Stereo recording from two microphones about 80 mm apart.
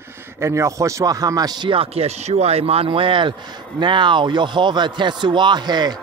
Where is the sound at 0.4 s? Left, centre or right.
Right.